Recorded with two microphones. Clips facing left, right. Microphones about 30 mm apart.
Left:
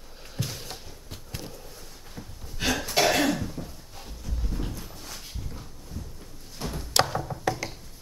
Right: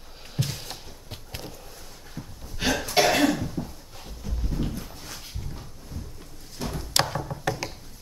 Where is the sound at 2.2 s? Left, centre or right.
Left.